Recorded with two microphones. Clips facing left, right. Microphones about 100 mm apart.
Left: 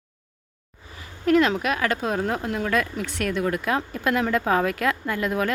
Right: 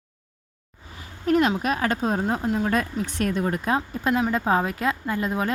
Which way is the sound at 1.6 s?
35° right (ahead or behind).